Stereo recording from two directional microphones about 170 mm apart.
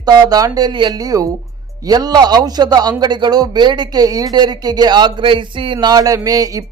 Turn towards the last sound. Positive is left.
turn(degrees=-20)  # may be behind; listen again after turning